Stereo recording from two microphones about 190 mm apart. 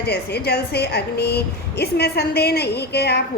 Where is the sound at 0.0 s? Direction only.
60° left (ahead or behind).